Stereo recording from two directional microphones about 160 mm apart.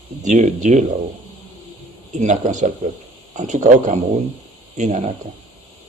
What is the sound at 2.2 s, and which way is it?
A man's voice, 50° right (ahead or behind).